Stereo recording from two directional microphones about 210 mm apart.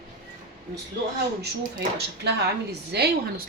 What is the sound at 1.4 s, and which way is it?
Speech, 50° right (ahead or behind).